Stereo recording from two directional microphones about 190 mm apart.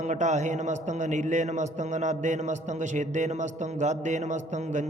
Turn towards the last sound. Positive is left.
turn(degrees=-40)  # may be behind; listen again after turning